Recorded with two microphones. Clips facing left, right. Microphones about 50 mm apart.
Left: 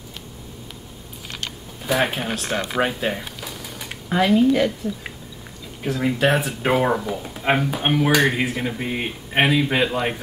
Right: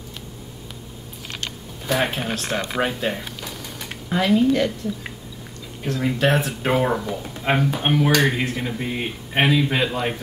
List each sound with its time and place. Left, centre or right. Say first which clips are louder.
1.4 s speech: even; centre